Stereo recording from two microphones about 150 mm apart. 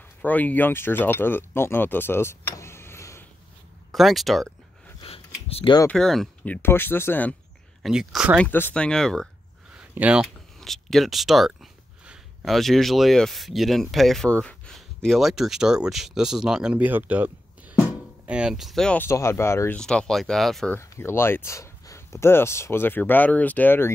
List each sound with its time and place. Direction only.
0.2 s speech: 10° left (ahead or behind)
3.9 s speech: centre (ahead or behind)
5.0 s a sound: 40° left (ahead or behind)
5.9 s speech: 5° left (ahead or behind)
7.8 s speech: centre (ahead or behind)
8.4 s speech: 15° left (ahead or behind)
9.8 s speech: 5° right (ahead or behind)
19.0 s speech: 20° left (ahead or behind)
19.8 s speech: 5° left (ahead or behind)
20.7 s speech: 15° left (ahead or behind)